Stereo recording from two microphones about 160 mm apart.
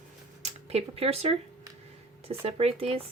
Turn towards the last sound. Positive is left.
turn(degrees=-40)  # may be behind; listen again after turning